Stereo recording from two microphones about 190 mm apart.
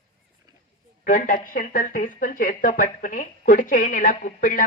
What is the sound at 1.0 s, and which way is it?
Speech, 45° left (ahead or behind).